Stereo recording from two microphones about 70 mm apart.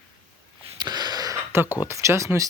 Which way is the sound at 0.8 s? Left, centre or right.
Right.